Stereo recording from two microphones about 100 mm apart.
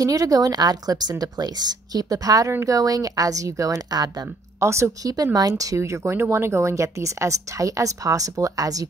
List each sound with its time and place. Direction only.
0.0 s speech: 40° right (ahead or behind)